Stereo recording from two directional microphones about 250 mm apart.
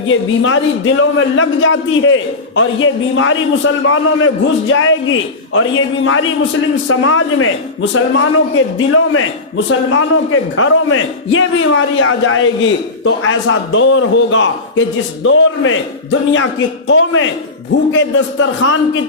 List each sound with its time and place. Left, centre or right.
0.1 s a man's voice: left